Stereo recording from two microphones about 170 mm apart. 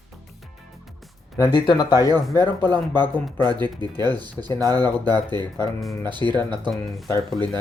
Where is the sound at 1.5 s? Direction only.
25° left (ahead or behind).